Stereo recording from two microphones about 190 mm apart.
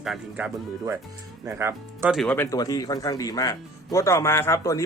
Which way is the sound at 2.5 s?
20° left (ahead or behind).